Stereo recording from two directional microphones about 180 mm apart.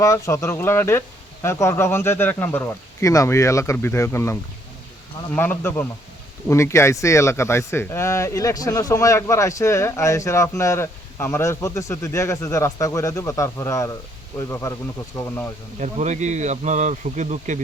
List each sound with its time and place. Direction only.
0.0 s speech: 15° left (ahead or behind)
15.8 s speech: 40° right (ahead or behind)